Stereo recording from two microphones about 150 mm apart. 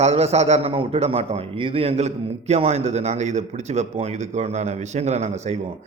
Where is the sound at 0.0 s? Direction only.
45° right (ahead or behind).